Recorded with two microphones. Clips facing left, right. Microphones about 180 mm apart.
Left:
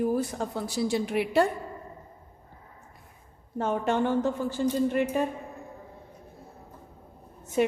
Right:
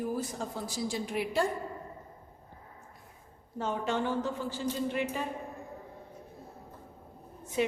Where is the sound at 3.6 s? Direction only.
55° left (ahead or behind).